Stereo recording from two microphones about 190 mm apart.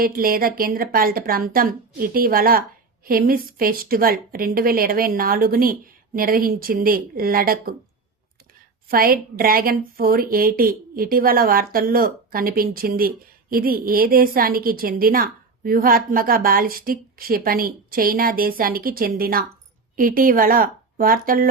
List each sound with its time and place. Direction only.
0.0 s a woman's voice: 50° right (ahead or behind)
8.9 s a woman's voice: 50° right (ahead or behind)